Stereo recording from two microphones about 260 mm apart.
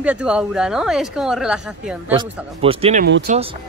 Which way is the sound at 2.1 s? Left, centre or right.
Right.